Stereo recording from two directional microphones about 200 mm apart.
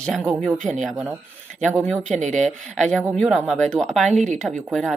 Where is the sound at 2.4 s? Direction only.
5° left (ahead or behind).